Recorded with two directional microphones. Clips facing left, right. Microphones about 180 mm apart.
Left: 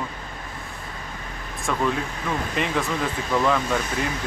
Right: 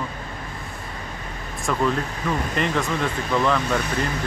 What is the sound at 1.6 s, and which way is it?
Speech, centre (ahead or behind).